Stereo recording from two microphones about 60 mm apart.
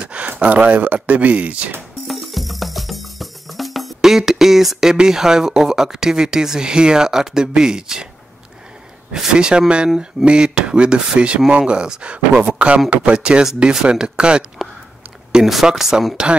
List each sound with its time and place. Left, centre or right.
0.0 s a sound: centre
0.4 s speech: right
2.0 s music: centre
9.1 s speech: centre